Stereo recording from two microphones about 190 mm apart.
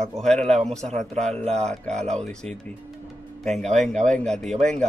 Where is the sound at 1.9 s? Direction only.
35° right (ahead or behind).